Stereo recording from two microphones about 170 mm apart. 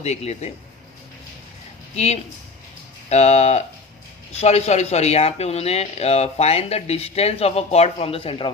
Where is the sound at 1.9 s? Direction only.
40° left (ahead or behind).